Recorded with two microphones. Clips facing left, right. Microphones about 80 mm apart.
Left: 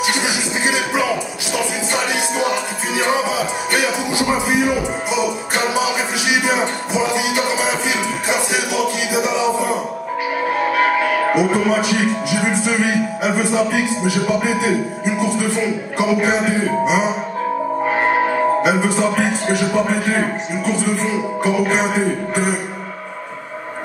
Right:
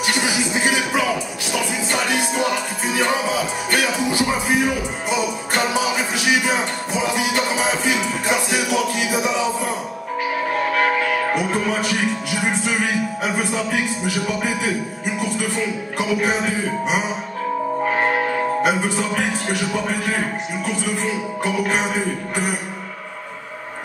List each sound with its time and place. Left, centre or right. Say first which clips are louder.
3.7 s music: even; centre
13.2 s speech: left 5 dB; centre
15.1 s music: left 4 dB; centre